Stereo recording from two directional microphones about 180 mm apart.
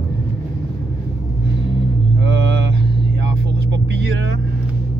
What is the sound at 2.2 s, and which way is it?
Vehicle, 70° right (ahead or behind).